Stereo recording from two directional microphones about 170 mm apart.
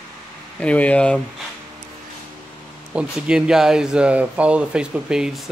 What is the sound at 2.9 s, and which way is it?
Speech, 5° right (ahead or behind).